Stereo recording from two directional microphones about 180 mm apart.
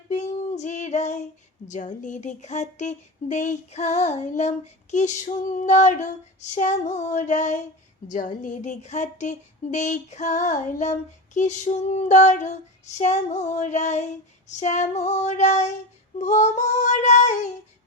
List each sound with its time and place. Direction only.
0.1 s female singing: 40° left (ahead or behind)
1.6 s speech: 45° left (ahead or behind)